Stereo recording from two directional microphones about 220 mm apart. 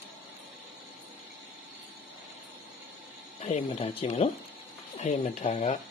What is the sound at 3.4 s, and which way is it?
Speech, 30° left (ahead or behind).